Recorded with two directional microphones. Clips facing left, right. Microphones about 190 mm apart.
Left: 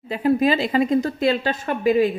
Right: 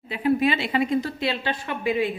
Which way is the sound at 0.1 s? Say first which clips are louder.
Left 3 dB; 40° left (ahead or behind).